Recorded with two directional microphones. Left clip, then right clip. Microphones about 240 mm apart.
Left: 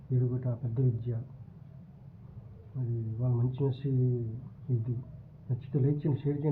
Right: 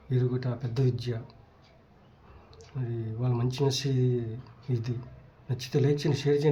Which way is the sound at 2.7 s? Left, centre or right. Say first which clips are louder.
Right 4 dB; right.